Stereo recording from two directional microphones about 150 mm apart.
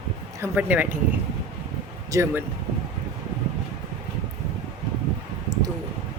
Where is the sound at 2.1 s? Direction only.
20° right (ahead or behind).